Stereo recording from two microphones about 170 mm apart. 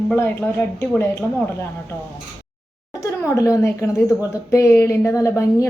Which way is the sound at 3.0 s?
20° left (ahead or behind).